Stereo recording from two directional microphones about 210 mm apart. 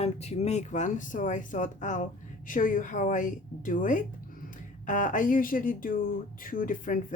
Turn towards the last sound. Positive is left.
turn(degrees=40)  # may be behind; listen again after turning